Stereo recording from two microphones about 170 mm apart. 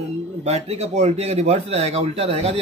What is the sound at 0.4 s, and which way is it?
A man's voice, 40° right (ahead or behind).